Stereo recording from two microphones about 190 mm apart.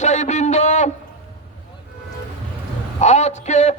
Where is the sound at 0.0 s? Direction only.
40° left (ahead or behind).